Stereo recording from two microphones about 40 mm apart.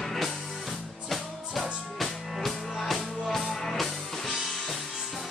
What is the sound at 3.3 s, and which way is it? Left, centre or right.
Music, centre.